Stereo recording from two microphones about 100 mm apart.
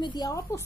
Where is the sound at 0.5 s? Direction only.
30° left (ahead or behind).